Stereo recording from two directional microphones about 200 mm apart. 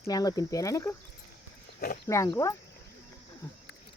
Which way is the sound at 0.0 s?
20° left (ahead or behind).